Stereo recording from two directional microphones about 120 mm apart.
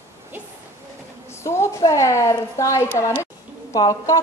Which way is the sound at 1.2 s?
20° left (ahead or behind).